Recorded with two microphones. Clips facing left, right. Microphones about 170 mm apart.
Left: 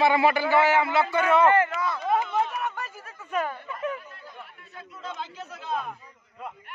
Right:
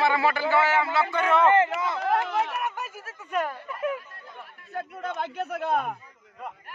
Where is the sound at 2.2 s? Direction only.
75° right (ahead or behind).